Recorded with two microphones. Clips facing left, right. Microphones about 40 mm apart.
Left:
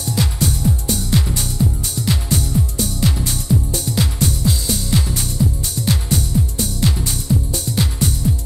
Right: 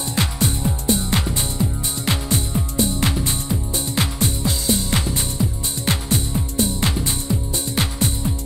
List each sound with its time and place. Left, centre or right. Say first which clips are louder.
0.1 s music: left 2 dB; right